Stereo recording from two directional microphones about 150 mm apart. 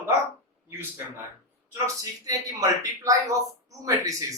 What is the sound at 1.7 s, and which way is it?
A man's voice, 20° right (ahead or behind).